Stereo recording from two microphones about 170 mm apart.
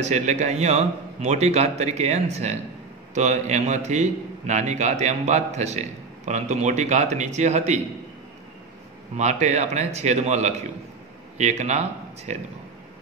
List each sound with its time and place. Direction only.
0.0 s a man's voice: 45° right (ahead or behind)
9.1 s a man's voice: 45° right (ahead or behind)